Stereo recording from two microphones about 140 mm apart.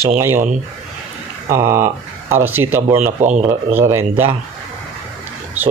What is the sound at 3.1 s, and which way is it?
Speech, 60° right (ahead or behind).